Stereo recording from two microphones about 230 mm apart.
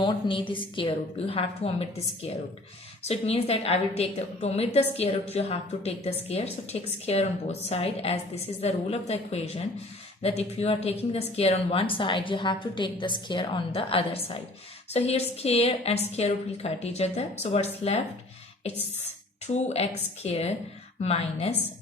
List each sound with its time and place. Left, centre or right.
0.0 s speech: left